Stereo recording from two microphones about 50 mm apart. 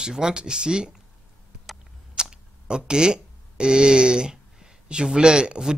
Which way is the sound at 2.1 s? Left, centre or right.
Centre.